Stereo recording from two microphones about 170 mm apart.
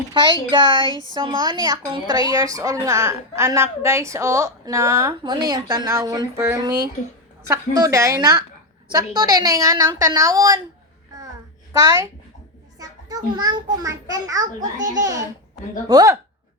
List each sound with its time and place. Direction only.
0.5 s a woman's voice: 25° right (ahead or behind)
11.7 s a woman's voice: 20° right (ahead or behind)